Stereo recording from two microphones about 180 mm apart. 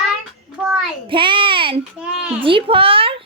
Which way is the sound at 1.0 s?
30° right (ahead or behind).